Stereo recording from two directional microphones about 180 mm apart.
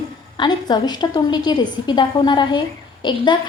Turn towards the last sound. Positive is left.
turn(degrees=25)  # may be behind; listen again after turning